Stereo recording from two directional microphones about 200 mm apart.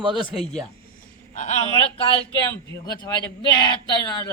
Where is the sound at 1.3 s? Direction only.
35° left (ahead or behind).